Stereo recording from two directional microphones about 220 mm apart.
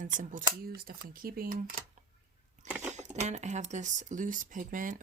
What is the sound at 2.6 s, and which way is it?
Speech, 5° right (ahead or behind).